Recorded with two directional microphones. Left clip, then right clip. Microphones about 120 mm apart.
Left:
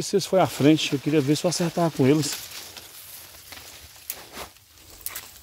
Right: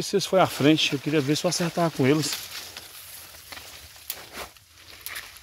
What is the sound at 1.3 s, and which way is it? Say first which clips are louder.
Speech: left 1 dB; 90° left.